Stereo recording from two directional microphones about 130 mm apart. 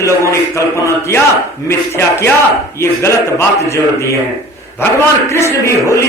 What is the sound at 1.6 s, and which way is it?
Speech, 20° left (ahead or behind).